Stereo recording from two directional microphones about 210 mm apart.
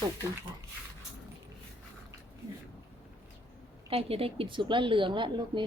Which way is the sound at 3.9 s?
25° right (ahead or behind).